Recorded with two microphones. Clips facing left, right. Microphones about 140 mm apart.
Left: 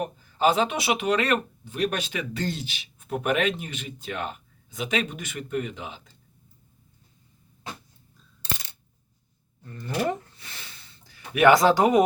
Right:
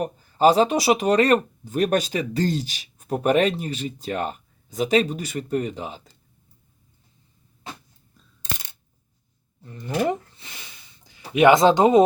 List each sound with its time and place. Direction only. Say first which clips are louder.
0.0 s speech: right 5 dB; 40° right (ahead or behind)
9.6 s speech: right 1 dB; 15° right (ahead or behind)
10.0 s a sound: right 3 dB; 15° right (ahead or behind)
11.3 s speech: right 3 dB; 20° right (ahead or behind)